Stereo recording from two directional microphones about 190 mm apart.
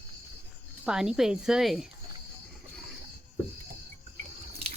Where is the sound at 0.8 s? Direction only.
5° right (ahead or behind).